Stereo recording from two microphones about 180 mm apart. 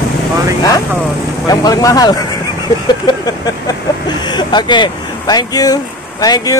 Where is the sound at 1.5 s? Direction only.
20° left (ahead or behind).